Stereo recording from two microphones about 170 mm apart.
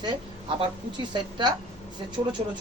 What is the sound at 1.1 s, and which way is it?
Speech, 25° right (ahead or behind).